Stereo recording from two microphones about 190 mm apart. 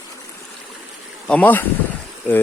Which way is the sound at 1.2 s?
10° left (ahead or behind).